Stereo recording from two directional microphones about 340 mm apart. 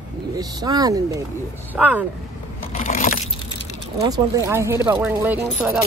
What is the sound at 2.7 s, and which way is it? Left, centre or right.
Keys jangling, left.